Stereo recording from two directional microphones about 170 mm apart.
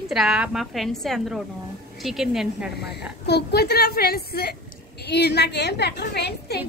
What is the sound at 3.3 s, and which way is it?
A woman's voice, 75° left (ahead or behind).